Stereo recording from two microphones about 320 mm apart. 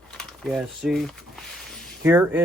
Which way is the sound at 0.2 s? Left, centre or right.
Centre.